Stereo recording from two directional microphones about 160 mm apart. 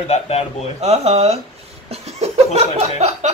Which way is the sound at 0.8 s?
40° right (ahead or behind).